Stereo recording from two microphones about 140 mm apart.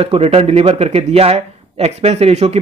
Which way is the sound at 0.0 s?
45° right (ahead or behind).